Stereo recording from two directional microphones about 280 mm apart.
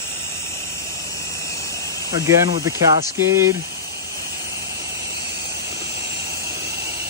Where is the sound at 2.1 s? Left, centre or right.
Centre.